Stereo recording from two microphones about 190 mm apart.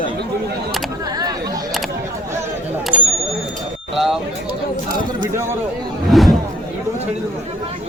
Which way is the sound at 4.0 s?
Centre (ahead or behind).